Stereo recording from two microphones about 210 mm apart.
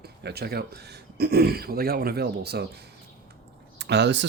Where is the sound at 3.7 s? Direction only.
55° right (ahead or behind).